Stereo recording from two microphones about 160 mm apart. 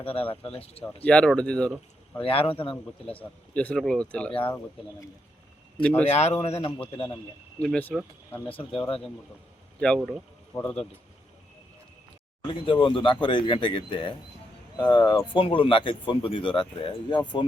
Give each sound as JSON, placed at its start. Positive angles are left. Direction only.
{"t": 0.0, "sound": "speech", "side_deg": 35}
{"t": 1.0, "sound": "speech", "side_deg": 5}
{"t": 2.1, "sound": "speech", "side_deg": 35}
{"t": 3.5, "sound": "speech", "side_deg": 10}
{"t": 5.8, "sound": "speech", "side_deg": 10}
{"t": 6.1, "sound": "speech", "side_deg": 45}
{"t": 7.6, "sound": "speech", "side_deg": 10}
{"t": 8.4, "sound": "speech", "side_deg": 35}
{"t": 10.0, "sound": "speech", "side_deg": -5}
{"t": 10.5, "sound": "speech", "side_deg": 10}
{"t": 12.5, "sound": "speech", "side_deg": 30}